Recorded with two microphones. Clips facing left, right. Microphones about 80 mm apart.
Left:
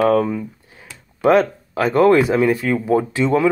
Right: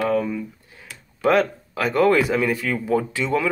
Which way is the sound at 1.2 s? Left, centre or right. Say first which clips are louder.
Left 4 dB; left.